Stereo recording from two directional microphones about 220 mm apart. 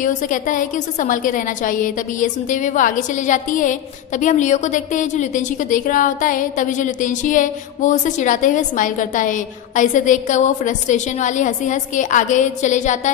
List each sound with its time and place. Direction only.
0.0 s a woman's voice: 35° left (ahead or behind)